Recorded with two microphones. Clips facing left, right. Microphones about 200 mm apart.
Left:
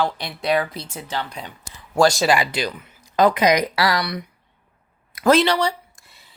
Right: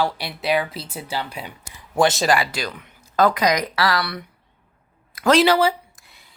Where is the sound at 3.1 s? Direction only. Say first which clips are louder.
Left 2 dB; 20° left (ahead or behind).